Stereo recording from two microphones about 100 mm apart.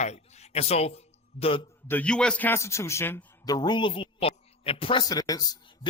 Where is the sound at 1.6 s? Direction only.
20° left (ahead or behind).